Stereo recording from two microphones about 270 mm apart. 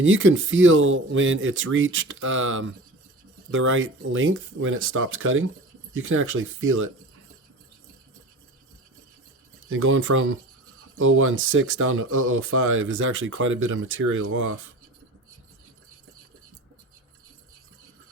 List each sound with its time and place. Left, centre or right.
0.0 s speech: right
9.6 s speech: right